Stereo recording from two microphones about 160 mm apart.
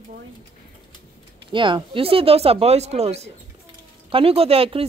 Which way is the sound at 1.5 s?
30° right (ahead or behind).